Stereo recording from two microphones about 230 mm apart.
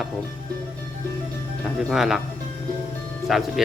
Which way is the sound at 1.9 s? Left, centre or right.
Centre.